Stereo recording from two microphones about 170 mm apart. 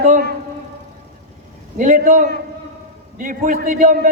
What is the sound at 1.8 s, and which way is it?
A man's voice, 50° right (ahead or behind).